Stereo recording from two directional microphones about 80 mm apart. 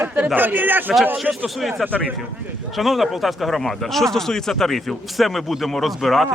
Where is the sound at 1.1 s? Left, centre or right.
Centre.